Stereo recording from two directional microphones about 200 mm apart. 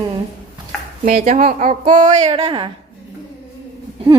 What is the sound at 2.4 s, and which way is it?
Speech, 25° right (ahead or behind).